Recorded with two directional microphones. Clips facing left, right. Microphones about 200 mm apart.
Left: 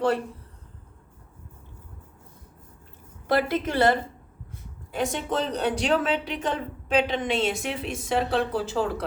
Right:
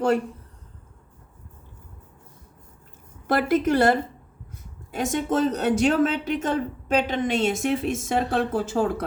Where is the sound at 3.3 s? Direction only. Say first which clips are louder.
Right 3 dB; 45° right (ahead or behind).